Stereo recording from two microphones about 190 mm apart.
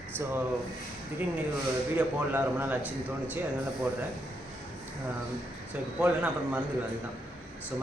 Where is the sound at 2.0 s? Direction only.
10° right (ahead or behind).